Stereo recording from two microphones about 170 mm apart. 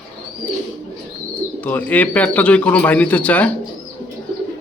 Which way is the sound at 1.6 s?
10° left (ahead or behind).